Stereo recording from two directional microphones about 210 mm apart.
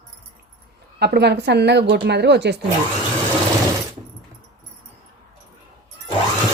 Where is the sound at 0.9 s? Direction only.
50° right (ahead or behind).